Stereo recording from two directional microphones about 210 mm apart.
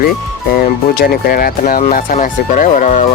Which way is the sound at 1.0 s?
45° left (ahead or behind).